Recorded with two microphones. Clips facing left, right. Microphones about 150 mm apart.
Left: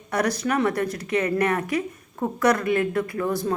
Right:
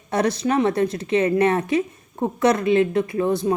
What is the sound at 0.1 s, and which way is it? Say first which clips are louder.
Speech: right 3 dB; 25° right (ahead or behind).